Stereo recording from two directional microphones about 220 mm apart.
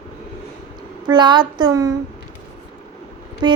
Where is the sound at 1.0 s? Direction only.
20° right (ahead or behind).